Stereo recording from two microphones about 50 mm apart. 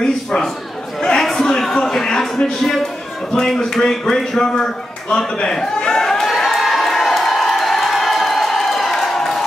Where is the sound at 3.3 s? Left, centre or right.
Centre.